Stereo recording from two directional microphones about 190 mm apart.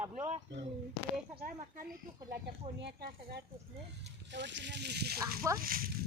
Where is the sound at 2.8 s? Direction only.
60° right (ahead or behind).